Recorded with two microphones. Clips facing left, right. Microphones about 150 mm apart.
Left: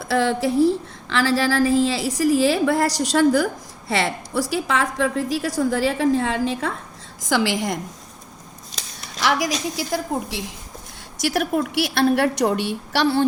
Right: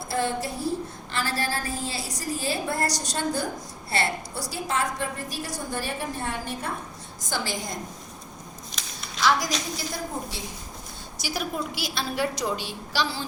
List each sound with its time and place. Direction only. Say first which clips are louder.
0.0 s a woman's voice: left 7 dB; 90° left
9.2 s a woman's voice: left 3 dB; 80° left
11.2 s a woman's voice: left 9 dB; 75° left (ahead or behind)